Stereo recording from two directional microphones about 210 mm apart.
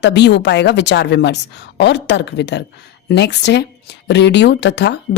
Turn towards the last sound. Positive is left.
turn(degrees=55)  # may be behind; listen again after turning